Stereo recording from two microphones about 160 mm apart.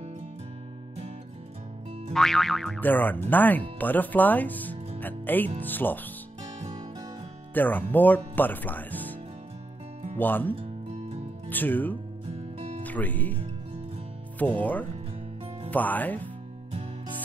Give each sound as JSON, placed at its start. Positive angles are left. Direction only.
{"t": 2.1, "sound": "speech", "side_deg": 0}
{"t": 7.5, "sound": "speech", "side_deg": 10}
{"t": 10.1, "sound": "speech", "side_deg": 10}
{"t": 10.5, "sound": "music", "side_deg": -35}
{"t": 11.4, "sound": "speech", "side_deg": 10}
{"t": 12.5, "sound": "music", "side_deg": -35}
{"t": 12.8, "sound": "speech", "side_deg": 10}
{"t": 14.4, "sound": "speech", "side_deg": 10}